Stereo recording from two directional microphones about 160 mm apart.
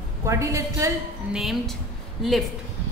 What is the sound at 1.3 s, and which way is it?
A woman's voice, centre (ahead or behind).